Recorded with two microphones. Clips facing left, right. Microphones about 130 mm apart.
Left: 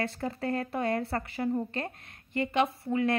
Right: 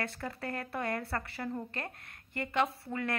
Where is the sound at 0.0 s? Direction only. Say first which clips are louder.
Left 6 dB; 25° left (ahead or behind).